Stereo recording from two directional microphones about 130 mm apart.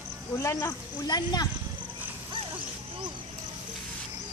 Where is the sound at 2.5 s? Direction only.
40° right (ahead or behind).